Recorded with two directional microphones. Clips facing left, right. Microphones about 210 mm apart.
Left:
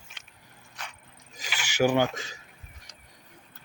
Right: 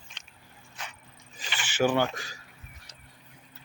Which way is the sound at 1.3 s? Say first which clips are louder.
Left 2 dB; 10° left (ahead or behind).